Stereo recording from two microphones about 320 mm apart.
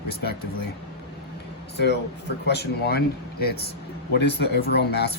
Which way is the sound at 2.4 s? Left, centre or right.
Left.